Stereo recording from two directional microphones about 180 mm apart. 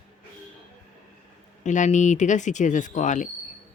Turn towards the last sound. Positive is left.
turn(degrees=45)  # may be behind; listen again after turning